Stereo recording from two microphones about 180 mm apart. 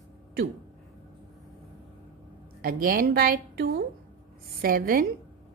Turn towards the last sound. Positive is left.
turn(degrees=-55)  # may be behind; listen again after turning